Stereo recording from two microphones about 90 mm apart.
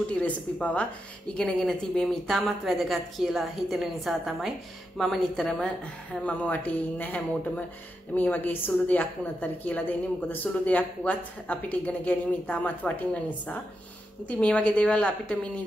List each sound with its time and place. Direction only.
0.2 s a woman's voice: 15° left (ahead or behind)
6.2 s a woman's voice: 15° left (ahead or behind)